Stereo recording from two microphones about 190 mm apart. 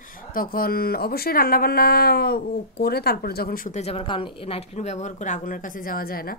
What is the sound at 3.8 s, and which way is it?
Speech, 30° left (ahead or behind).